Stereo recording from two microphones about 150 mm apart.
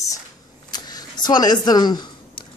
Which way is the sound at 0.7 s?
25° left (ahead or behind).